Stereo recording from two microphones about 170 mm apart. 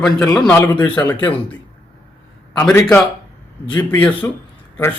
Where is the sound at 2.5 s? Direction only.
15° left (ahead or behind).